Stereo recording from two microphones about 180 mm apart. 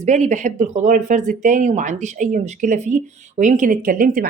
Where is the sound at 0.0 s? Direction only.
40° right (ahead or behind).